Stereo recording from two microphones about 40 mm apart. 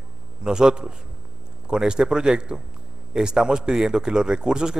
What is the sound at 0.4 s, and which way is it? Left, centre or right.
A man's voice, centre.